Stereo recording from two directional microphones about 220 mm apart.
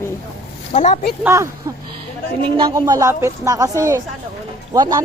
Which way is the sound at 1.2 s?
15° right (ahead or behind).